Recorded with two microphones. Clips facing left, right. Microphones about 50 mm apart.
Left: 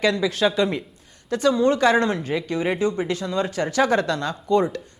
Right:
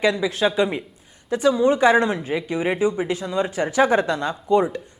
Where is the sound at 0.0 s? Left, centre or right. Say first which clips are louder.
Even; centre.